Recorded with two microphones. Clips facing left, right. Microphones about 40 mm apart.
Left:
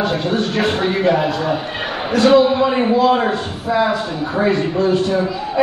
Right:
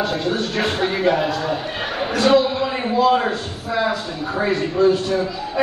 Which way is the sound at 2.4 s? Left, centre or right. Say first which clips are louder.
Left 7 dB; left.